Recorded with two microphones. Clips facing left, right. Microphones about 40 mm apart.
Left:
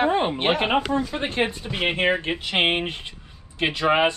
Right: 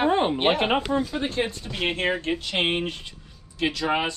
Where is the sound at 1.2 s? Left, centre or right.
Left.